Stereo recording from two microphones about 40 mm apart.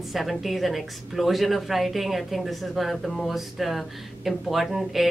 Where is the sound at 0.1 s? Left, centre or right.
Centre.